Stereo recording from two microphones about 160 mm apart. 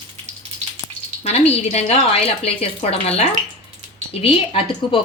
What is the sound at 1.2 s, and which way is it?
Speech, 40° left (ahead or behind).